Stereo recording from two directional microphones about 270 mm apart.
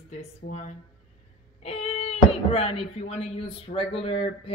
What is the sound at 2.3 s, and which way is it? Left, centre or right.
Speech, centre.